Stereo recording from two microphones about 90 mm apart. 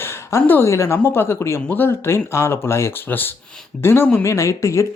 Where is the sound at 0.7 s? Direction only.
35° left (ahead or behind).